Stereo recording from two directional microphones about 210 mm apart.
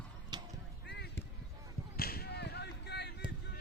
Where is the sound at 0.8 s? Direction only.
55° left (ahead or behind).